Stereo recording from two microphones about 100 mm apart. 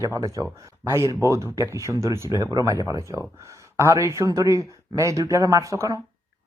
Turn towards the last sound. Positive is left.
turn(degrees=-30)  # may be behind; listen again after turning